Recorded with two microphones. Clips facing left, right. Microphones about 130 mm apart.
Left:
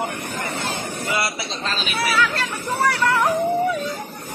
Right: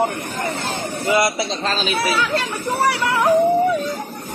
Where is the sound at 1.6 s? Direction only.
30° right (ahead or behind).